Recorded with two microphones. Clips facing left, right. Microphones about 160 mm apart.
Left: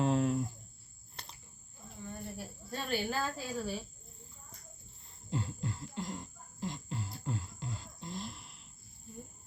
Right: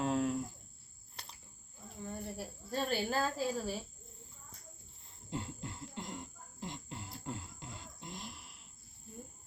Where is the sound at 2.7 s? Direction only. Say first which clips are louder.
Right 1 dB; 35° right (ahead or behind).